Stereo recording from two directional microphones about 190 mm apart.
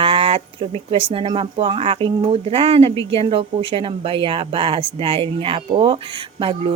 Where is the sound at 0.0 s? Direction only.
30° right (ahead or behind).